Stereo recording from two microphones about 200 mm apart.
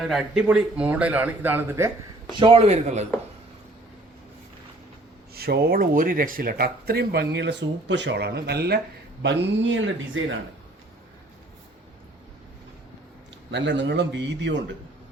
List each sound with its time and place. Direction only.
0.0 s a man's voice: centre (ahead or behind)
2.3 s speech: 25° right (ahead or behind)
5.3 s speech: 50° right (ahead or behind); by 10.3 s 70° right (ahead or behind)
13.5 s a man's voice: 60° right (ahead or behind)